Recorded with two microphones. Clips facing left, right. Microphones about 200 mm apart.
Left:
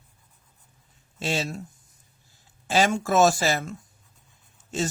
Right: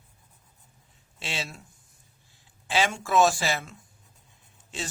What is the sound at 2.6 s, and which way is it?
Speech, 40° left (ahead or behind).